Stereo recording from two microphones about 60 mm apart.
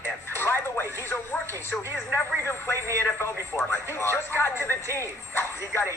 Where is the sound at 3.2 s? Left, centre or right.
Left.